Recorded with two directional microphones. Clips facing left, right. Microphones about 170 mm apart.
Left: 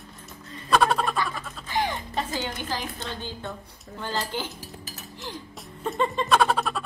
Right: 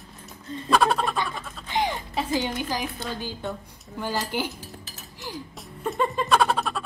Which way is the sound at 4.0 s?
10° right (ahead or behind).